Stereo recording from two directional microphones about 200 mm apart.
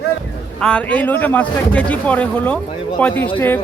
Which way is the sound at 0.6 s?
5° left (ahead or behind).